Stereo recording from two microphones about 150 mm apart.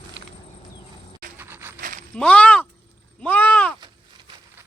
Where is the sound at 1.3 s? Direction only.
15° right (ahead or behind).